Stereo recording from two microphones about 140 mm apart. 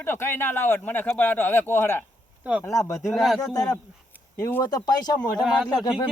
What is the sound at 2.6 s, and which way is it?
Speech, 20° left (ahead or behind).